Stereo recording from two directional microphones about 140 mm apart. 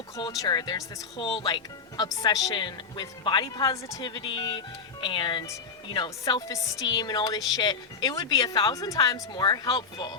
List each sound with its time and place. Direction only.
0.2 s speech: 30° left (ahead or behind)